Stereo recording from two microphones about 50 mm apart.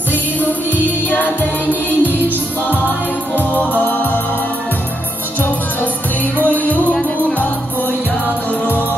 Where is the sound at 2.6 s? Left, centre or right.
Left.